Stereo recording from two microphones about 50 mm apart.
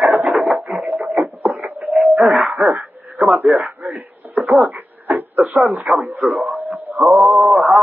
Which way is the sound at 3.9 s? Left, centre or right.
Right.